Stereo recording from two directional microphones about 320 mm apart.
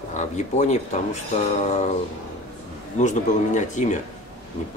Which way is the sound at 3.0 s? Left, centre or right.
Left.